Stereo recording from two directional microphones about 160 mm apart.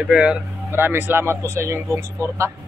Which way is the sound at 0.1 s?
5° right (ahead or behind).